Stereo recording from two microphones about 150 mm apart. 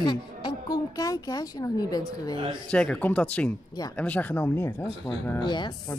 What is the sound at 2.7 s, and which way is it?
Speech, 5° left (ahead or behind).